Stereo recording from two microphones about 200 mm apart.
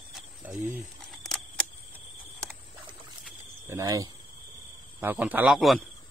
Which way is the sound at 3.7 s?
20° right (ahead or behind).